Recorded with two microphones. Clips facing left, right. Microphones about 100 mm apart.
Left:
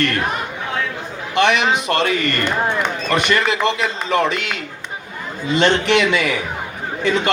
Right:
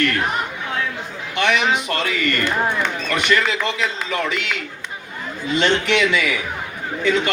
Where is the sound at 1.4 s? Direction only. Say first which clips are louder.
Left 3 dB; 25° left (ahead or behind).